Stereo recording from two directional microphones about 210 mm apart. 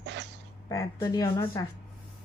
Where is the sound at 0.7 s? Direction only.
15° left (ahead or behind).